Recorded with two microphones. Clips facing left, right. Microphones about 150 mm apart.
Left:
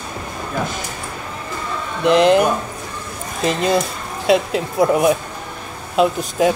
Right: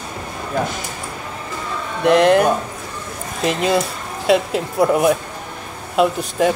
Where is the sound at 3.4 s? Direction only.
5° right (ahead or behind).